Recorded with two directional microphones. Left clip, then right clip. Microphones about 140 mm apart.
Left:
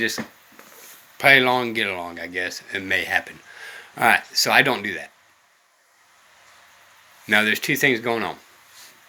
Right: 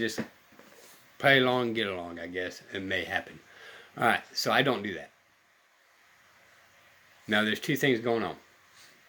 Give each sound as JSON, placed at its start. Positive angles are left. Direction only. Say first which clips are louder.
{"t": 1.2, "sound": "speech", "louder": "left 8 dB", "side_deg": -50}
{"t": 7.3, "sound": "speech", "louder": "left 9 dB", "side_deg": -40}